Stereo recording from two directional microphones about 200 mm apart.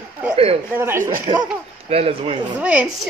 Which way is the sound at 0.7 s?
10° right (ahead or behind).